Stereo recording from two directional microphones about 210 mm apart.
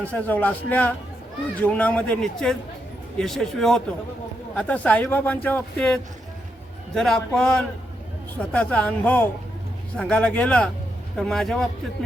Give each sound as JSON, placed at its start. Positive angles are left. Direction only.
{"t": 0.0, "sound": "a man's voice", "side_deg": 5}